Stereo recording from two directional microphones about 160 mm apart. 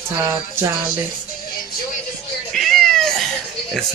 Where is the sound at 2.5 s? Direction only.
Centre (ahead or behind).